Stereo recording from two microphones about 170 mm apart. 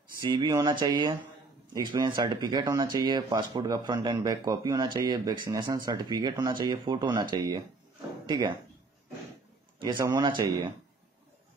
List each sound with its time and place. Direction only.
0.3 s speech: 25° right (ahead or behind)
9.8 s a man's voice: 25° right (ahead or behind)